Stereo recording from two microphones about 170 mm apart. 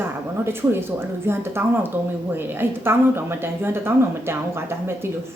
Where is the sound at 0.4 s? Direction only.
15° right (ahead or behind).